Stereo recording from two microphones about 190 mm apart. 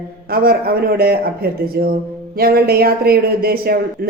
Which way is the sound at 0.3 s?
55° right (ahead or behind).